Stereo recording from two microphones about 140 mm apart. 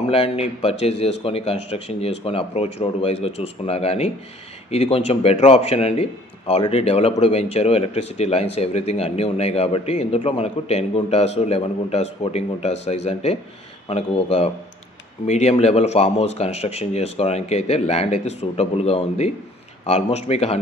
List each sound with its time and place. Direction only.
0.1 s a man's voice: 45° left (ahead or behind)